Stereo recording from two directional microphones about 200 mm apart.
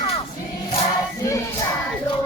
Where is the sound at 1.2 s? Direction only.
15° left (ahead or behind).